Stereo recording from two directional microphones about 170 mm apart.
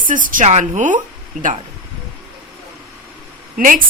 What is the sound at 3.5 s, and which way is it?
Speech, 55° right (ahead or behind).